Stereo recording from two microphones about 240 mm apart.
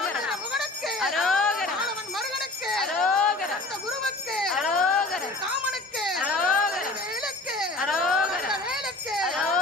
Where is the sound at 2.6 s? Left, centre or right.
Centre.